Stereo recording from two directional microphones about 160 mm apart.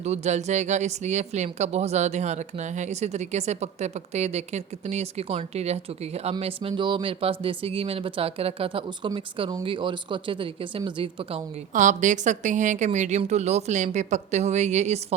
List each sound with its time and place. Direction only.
0.0 s speech: 45° right (ahead or behind)
11.7 s speech: 50° right (ahead or behind)